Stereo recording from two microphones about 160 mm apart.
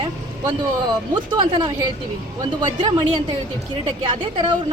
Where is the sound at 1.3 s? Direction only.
30° right (ahead or behind).